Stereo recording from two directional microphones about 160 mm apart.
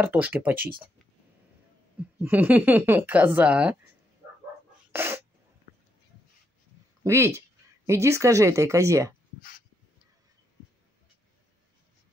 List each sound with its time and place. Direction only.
0.0 s speech: 10° right (ahead or behind)
2.0 s speech: 10° right (ahead or behind)
4.9 s speech: 15° right (ahead or behind)
7.0 s speech: 15° right (ahead or behind)